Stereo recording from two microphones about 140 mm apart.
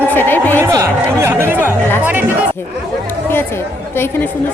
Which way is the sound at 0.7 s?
20° right (ahead or behind).